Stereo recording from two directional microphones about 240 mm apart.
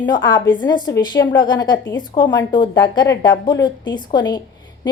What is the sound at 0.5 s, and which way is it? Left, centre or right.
A woman's voice, centre.